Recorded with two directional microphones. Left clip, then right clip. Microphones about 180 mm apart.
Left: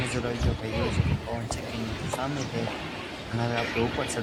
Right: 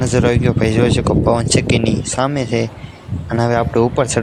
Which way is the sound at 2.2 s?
55° right (ahead or behind).